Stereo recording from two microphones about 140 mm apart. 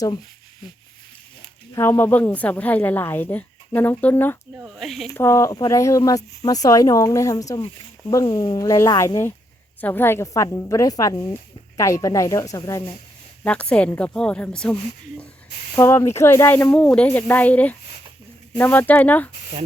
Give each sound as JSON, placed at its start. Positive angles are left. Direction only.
{"t": 1.7, "sound": "a woman's voice", "side_deg": 20}
{"t": 4.6, "sound": "speech", "side_deg": 0}
{"t": 5.1, "sound": "speech", "side_deg": 20}
{"t": 8.2, "sound": "speech", "side_deg": 35}
{"t": 8.5, "sound": "speech", "side_deg": 25}
{"t": 13.4, "sound": "a woman's voice", "side_deg": 10}
{"t": 16.6, "sound": "a woman's voice", "side_deg": 10}